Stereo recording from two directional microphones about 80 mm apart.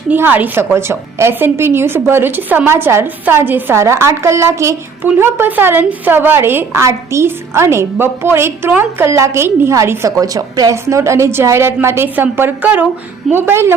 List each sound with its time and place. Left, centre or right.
0.1 s a woman's voice: right
5.0 s a woman's voice: right
10.1 s a woman's voice: right; by 12.9 s centre
13.3 s a woman's voice: right